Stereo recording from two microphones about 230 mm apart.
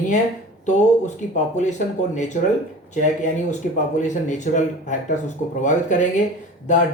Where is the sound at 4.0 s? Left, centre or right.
Left.